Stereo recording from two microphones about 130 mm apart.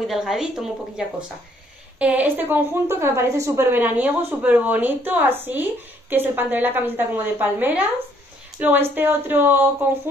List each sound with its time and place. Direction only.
0.0 s a woman's voice: centre (ahead or behind); by 9.8 s 15° right (ahead or behind)